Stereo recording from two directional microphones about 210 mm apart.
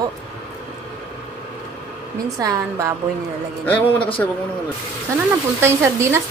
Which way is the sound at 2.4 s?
15° right (ahead or behind).